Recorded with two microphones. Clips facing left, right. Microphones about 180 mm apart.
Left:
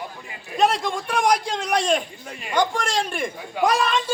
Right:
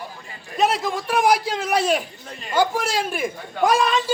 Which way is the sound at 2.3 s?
10° left (ahead or behind).